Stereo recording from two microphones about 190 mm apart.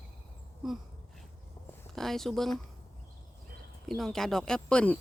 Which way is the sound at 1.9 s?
Centre (ahead or behind).